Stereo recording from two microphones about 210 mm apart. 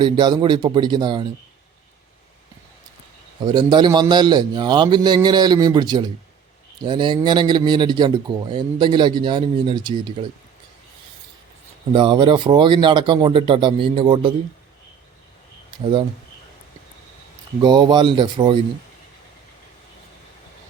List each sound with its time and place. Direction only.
0.0 s speech: 20° right (ahead or behind)
3.4 s speech: 20° right (ahead or behind)
11.9 s speech: 20° right (ahead or behind)
15.7 s speech: 20° right (ahead or behind)
17.6 s speech: 20° right (ahead or behind)